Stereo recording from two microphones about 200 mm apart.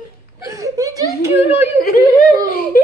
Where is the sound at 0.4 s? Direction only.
15° right (ahead or behind).